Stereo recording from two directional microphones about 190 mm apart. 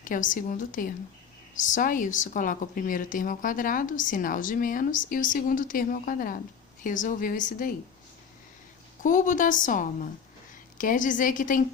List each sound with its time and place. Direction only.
0.0 s a woman's voice: 45° left (ahead or behind)
9.0 s a woman's voice: 45° left (ahead or behind)